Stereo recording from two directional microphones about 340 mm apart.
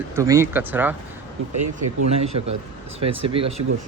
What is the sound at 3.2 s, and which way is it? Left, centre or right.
Speech, centre.